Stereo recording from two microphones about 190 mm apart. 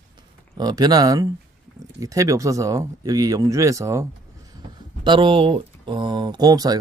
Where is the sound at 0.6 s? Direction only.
20° right (ahead or behind).